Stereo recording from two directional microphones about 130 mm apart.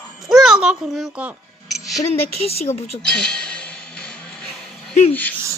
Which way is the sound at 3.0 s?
5° left (ahead or behind).